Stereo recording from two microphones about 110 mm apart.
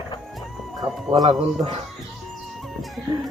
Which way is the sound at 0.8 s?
55° right (ahead or behind).